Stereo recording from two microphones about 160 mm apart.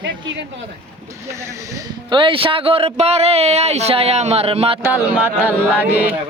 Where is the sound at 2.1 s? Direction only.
35° right (ahead or behind).